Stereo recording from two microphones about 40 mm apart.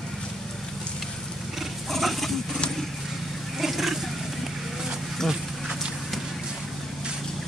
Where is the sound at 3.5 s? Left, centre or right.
Centre.